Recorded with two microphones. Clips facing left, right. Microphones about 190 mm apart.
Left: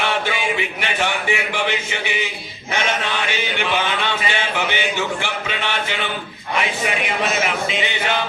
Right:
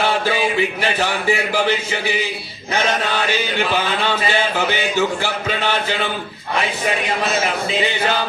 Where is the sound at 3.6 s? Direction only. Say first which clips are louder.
Even; 40° right (ahead or behind).